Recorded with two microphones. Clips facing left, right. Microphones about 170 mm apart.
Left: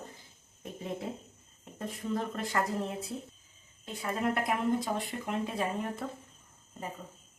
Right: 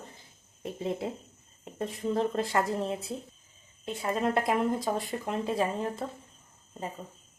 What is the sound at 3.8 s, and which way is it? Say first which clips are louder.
Speech: right 3 dB; 25° right (ahead or behind).